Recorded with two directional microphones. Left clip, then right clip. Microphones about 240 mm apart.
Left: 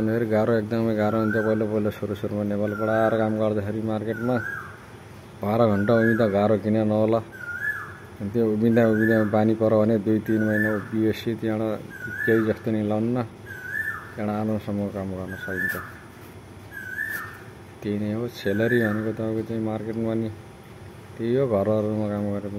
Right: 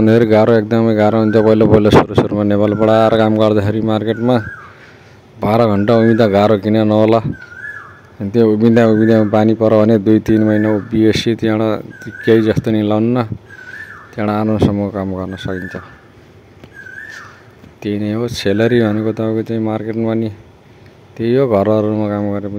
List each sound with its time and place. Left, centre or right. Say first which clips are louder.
0.0 s speech: right 13 dB; right
8.3 s speech: right 11 dB; right
17.8 s speech: right 10 dB; right